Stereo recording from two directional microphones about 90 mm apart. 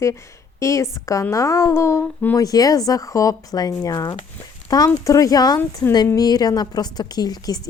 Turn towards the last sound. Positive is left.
turn(degrees=45)  # may be behind; listen again after turning